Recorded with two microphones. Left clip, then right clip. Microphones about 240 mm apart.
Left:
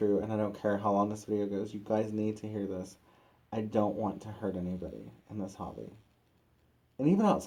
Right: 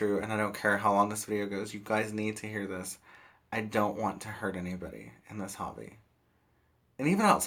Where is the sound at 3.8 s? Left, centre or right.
Right.